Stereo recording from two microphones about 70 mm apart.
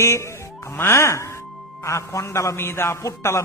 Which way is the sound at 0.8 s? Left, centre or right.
Left.